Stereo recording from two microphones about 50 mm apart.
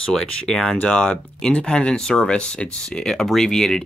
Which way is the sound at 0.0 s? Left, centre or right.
Centre.